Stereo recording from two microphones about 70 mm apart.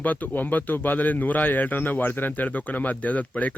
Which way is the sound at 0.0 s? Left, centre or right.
Left.